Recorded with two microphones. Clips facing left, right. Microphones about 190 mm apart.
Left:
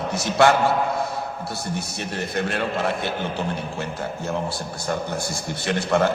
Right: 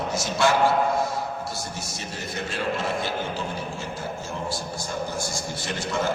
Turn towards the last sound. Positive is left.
turn(degrees=60)  # may be behind; listen again after turning